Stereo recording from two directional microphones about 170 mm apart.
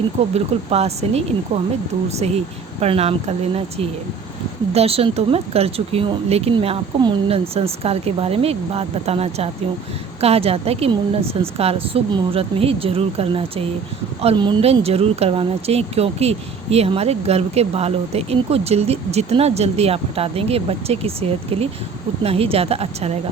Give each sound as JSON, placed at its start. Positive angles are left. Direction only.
{"t": 0.3, "sound": "speech", "side_deg": -40}